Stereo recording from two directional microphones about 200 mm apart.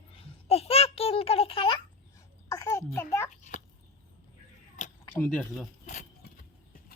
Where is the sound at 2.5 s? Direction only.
15° left (ahead or behind).